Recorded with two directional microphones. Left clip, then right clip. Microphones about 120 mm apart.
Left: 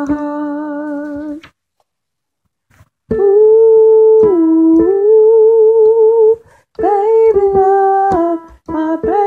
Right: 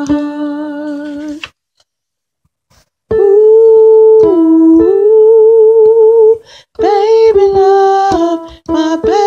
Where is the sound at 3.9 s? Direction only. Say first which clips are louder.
Right 3 dB; 25° right (ahead or behind).